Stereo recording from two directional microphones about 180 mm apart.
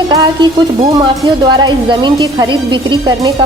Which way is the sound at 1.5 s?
25° right (ahead or behind).